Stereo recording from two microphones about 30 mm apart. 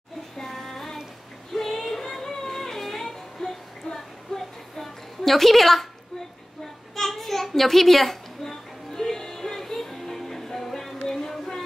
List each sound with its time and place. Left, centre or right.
0.4 s child singing: centre
1.5 s music: centre
6.6 s a sound: centre
11.1 s child singing: centre